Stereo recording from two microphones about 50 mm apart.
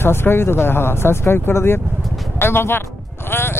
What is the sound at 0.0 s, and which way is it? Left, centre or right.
Speech, left.